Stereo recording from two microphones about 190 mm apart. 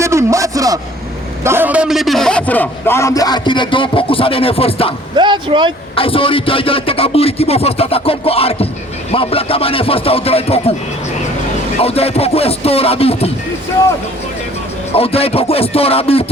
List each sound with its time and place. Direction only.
0.0 s a sound: 15° right (ahead or behind)
1.5 s a man's voice: 10° right (ahead or behind); by 4.9 s 30° left (ahead or behind)
5.1 s speech: 25° right (ahead or behind)
6.0 s music: 30° left (ahead or behind)
9.1 s a man's voice: 30° left (ahead or behind)
11.8 s music: 30° left (ahead or behind)
14.9 s music: 30° left (ahead or behind)